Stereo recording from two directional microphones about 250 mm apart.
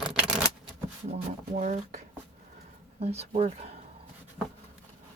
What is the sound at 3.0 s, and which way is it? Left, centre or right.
Speech, right.